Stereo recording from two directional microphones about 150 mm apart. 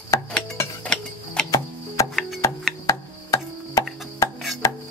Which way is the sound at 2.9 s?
20° left (ahead or behind).